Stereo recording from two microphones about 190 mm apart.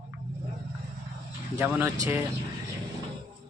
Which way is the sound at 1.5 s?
10° right (ahead or behind).